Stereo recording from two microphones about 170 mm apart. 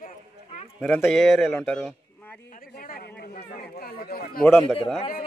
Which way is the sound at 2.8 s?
60° left (ahead or behind).